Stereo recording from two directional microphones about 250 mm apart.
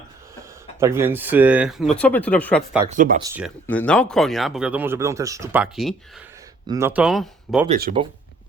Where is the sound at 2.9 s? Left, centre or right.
Right.